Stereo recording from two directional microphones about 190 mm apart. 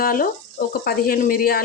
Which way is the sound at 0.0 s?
50° left (ahead or behind).